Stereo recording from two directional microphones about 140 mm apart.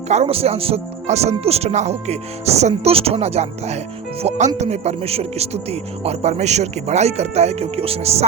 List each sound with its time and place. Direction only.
0.1 s speech: 50° right (ahead or behind)